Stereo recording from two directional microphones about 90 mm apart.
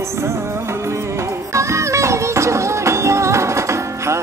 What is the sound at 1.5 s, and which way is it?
Music, 35° right (ahead or behind).